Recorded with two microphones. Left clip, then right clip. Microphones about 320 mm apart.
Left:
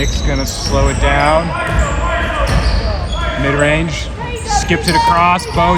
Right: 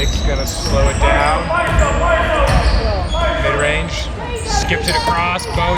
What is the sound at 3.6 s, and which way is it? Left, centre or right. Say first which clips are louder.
Speech: left 3 dB; centre.